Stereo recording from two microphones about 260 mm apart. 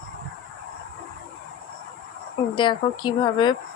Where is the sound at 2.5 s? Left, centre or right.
Centre.